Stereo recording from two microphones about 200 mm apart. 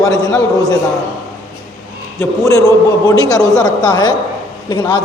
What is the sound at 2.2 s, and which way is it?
A man's voice, 15° left (ahead or behind).